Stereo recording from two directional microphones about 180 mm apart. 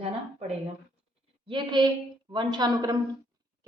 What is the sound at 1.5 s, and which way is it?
A woman's voice, 25° right (ahead or behind).